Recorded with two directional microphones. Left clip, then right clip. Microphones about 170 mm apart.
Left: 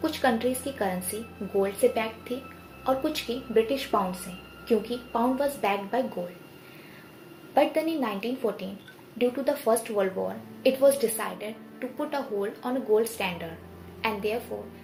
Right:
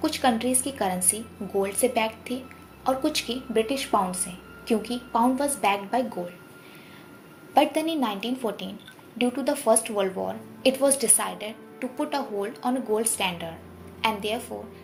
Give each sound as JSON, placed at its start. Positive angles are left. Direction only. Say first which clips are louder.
{"t": 0.0, "sound": "a woman's voice", "louder": "right 1 dB", "side_deg": -40}
{"t": 7.5, "sound": "a woman's voice", "louder": "right 2 dB", "side_deg": -45}